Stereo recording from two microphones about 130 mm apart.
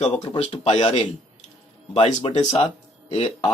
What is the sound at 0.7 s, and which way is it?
Speech, 60° left (ahead or behind).